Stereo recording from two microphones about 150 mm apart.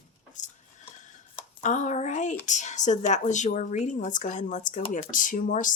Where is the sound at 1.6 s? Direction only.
55° left (ahead or behind).